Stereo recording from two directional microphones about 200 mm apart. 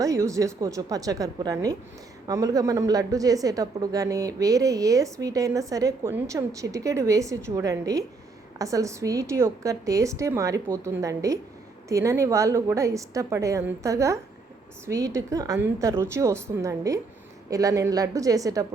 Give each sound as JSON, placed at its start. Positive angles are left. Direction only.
{"t": 0.0, "sound": "a woman's voice", "side_deg": -15}